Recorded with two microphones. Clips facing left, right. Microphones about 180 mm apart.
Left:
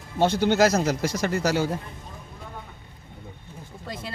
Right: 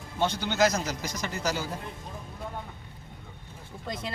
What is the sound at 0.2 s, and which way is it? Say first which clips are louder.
Speech: left 6 dB; 50° left (ahead or behind).